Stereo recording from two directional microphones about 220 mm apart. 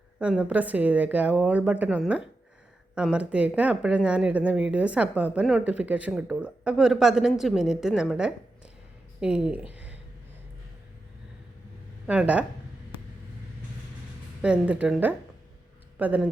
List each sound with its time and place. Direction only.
0.2 s a woman's voice: 5° right (ahead or behind)
9.7 s a sound: 5° right (ahead or behind)
12.0 s a woman's voice: 5° right (ahead or behind)
14.4 s speech: 5° right (ahead or behind)